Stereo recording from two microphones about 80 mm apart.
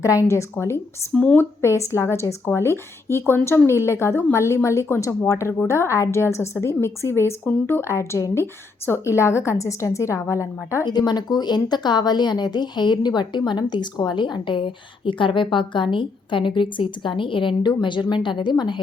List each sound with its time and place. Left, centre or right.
0.0 s a woman's voice: left
1.1 s speech: centre
1.4 s a woman's voice: left
10.8 s a woman's voice: left